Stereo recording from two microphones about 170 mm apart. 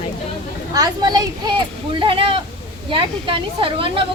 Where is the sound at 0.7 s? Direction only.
20° right (ahead or behind).